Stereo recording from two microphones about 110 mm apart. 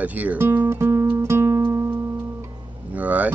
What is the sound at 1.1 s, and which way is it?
Music, 25° right (ahead or behind).